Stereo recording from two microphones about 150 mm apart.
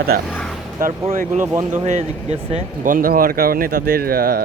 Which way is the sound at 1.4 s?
15° right (ahead or behind).